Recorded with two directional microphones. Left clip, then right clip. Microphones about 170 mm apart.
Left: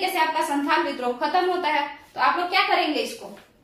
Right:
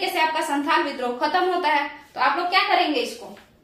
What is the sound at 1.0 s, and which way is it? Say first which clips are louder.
A woman's voice: right 1 dB; 30° right (ahead or behind).